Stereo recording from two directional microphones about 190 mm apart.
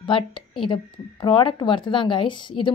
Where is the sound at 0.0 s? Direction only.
25° left (ahead or behind).